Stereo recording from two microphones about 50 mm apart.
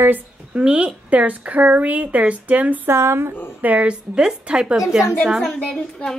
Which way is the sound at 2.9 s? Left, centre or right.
Right.